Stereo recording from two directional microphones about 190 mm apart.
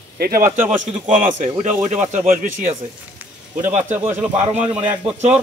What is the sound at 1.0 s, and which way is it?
Speech, 40° right (ahead or behind).